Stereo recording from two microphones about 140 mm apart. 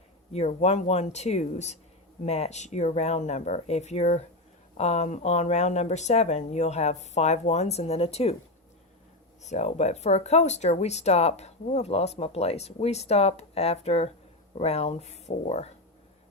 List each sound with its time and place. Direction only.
0.3 s speech: 50° left (ahead or behind)
9.4 s speech: 55° left (ahead or behind)